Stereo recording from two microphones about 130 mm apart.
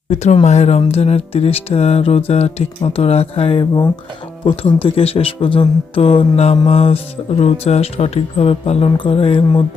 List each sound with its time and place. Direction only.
0.1 s speech: 60° left (ahead or behind); by 9.6 s 40° left (ahead or behind)